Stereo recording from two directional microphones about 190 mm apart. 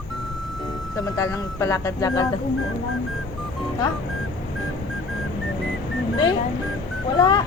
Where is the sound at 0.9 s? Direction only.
15° left (ahead or behind).